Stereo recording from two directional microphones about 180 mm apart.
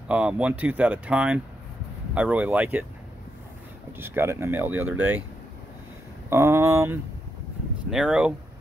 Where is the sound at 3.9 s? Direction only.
10° right (ahead or behind).